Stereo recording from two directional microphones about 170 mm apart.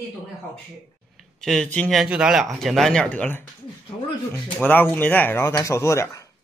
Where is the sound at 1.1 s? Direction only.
Centre (ahead or behind).